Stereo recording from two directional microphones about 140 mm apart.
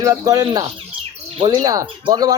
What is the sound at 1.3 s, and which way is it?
Speech, 40° right (ahead or behind).